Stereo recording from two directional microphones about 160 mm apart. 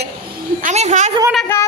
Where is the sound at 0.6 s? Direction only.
45° right (ahead or behind).